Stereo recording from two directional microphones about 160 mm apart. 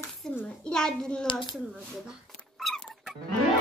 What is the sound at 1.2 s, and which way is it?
Speech, 30° left (ahead or behind).